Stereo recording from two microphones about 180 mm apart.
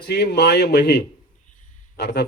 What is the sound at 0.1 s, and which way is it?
Speech, 70° left (ahead or behind).